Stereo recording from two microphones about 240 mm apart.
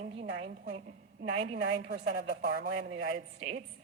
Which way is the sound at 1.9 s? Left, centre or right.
Right.